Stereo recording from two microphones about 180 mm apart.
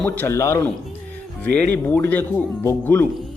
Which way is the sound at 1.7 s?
10° left (ahead or behind).